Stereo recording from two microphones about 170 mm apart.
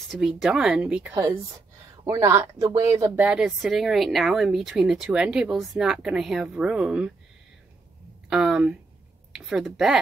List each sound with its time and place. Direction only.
0.1 s speech: 5° right (ahead or behind)
1.1 s speech: 20° right (ahead or behind)
3.3 s speech: 5° right (ahead or behind)
8.3 s speech: 5° right (ahead or behind)